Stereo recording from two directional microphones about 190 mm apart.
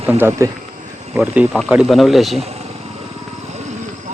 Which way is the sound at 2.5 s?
35° right (ahead or behind).